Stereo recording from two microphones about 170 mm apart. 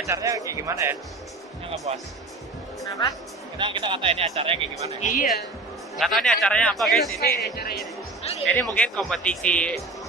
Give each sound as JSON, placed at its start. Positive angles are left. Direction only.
{"t": 0.1, "sound": "speech", "side_deg": -20}
{"t": 2.8, "sound": "speech", "side_deg": 20}
{"t": 3.5, "sound": "speech", "side_deg": -30}
{"t": 5.0, "sound": "speech", "side_deg": 50}
{"t": 5.9, "sound": "speech", "side_deg": 0}
{"t": 7.2, "sound": "speech", "side_deg": 65}
{"t": 8.2, "sound": "music", "side_deg": 35}
{"t": 8.7, "sound": "speech", "side_deg": 5}